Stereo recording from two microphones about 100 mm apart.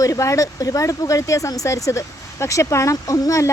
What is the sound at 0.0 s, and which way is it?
Speech, 30° left (ahead or behind).